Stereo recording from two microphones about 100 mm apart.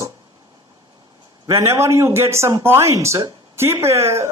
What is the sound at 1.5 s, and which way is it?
A man's voice, 25° right (ahead or behind).